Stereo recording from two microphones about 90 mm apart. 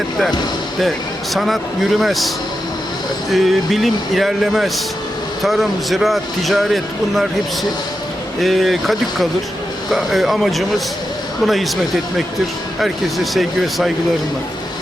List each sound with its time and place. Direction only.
0.8 s a man's voice: centre (ahead or behind)
3.3 s a man's voice: centre (ahead or behind)
8.4 s a man's voice: centre (ahead or behind)
12.8 s a man's voice: centre (ahead or behind)